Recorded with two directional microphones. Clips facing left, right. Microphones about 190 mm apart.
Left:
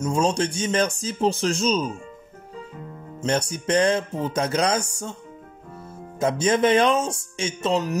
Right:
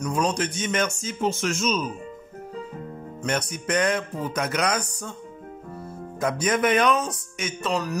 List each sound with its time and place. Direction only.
0.0 s speech: 25° left (ahead or behind)
3.2 s music: 30° left (ahead or behind)
6.1 s music: 25° left (ahead or behind)